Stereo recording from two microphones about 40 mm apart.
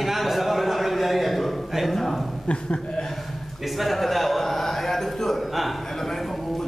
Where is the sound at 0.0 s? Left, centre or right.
Centre.